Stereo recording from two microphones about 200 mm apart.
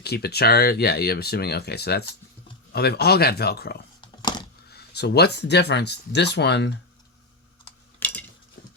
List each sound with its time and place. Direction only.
0.0 s speech: 55° left (ahead or behind)
4.2 s a sound: 20° left (ahead or behind)
4.7 s speech: 55° left (ahead or behind)
7.9 s cutlery: 5° left (ahead or behind)